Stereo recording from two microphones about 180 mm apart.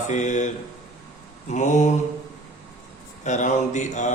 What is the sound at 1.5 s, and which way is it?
Speech, 40° left (ahead or behind).